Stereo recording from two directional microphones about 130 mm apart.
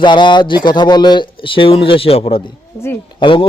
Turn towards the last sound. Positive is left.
turn(degrees=40)  # may be behind; listen again after turning